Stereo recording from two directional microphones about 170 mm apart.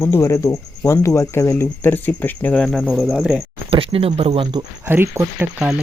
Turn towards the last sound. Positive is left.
turn(degrees=-10)  # may be behind; listen again after turning